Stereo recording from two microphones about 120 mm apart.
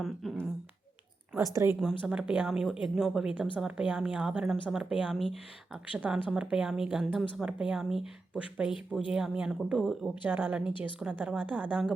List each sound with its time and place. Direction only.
0.0 s a sound: centre (ahead or behind)
1.4 s speech: 25° right (ahead or behind)
2.0 s a woman's voice: 10° right (ahead or behind)
10.2 s a woman's voice: 15° right (ahead or behind)